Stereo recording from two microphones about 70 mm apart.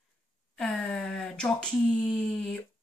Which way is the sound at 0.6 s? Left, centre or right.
Centre.